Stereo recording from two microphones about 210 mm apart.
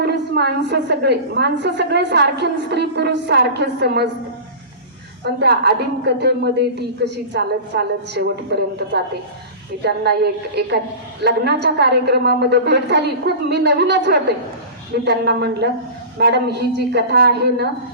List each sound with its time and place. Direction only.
0.0 s a woman's voice: 50° right (ahead or behind)
5.2 s a woman's voice: 50° right (ahead or behind)